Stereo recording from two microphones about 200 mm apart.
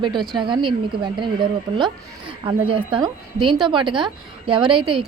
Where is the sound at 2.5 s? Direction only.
25° right (ahead or behind).